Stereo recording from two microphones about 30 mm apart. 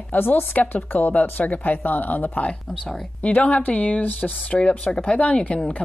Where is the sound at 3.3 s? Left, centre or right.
Left.